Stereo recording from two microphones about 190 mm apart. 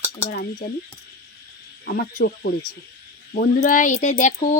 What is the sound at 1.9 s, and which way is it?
A woman's voice, 50° left (ahead or behind).